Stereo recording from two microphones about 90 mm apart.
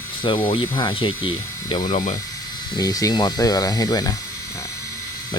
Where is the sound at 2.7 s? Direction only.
40° left (ahead or behind).